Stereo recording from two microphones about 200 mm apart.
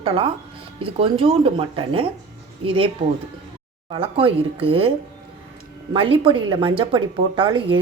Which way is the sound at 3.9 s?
25° right (ahead or behind).